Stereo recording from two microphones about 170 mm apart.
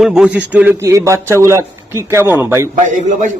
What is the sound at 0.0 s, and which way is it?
A man's voice, 5° right (ahead or behind).